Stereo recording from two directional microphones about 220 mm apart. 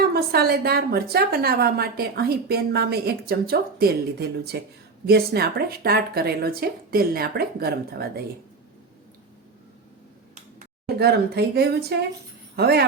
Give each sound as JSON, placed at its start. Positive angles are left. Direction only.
{"t": 0.0, "sound": "a woman's voice", "side_deg": -45}
{"t": 10.8, "sound": "a woman's voice", "side_deg": -45}